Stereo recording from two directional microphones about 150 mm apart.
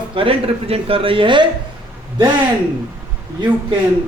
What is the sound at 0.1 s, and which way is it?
Speech, 35° right (ahead or behind).